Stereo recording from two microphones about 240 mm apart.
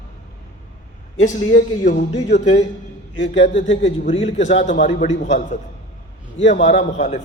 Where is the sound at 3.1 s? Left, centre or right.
Left.